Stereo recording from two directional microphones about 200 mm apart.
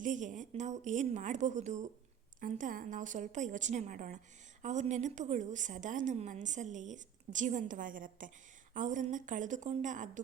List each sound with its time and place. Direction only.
0.0 s a woman's voice: 40° right (ahead or behind)